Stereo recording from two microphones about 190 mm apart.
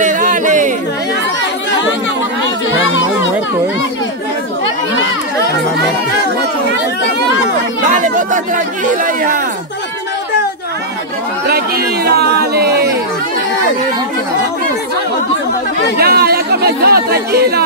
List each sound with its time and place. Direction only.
0.0 s a sound: 40° right (ahead or behind)
7.9 s speech: 40° right (ahead or behind)
11.4 s speech: 55° right (ahead or behind)
16.0 s speech: 55° right (ahead or behind)